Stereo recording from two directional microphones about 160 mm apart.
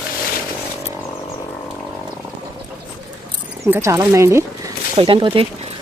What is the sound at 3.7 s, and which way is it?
Speech, 15° right (ahead or behind).